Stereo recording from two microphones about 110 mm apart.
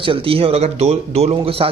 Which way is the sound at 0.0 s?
55° right (ahead or behind).